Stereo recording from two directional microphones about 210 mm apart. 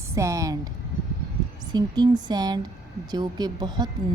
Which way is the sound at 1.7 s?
20° right (ahead or behind).